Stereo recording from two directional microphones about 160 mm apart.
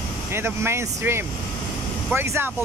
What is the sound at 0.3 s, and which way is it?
Speech, 15° right (ahead or behind).